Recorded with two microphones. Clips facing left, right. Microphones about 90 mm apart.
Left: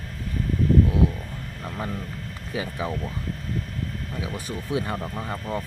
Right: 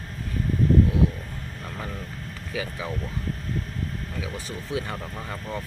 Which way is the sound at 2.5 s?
35° left (ahead or behind).